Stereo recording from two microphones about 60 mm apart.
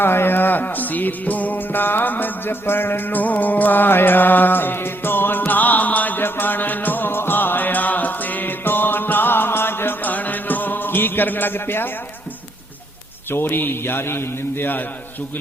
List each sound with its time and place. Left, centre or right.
0.0 s music: left
13.3 s a man's voice: left